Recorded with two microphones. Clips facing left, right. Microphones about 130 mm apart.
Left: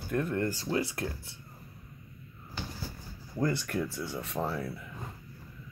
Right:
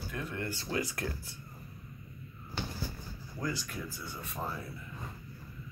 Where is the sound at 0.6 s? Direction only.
25° left (ahead or behind).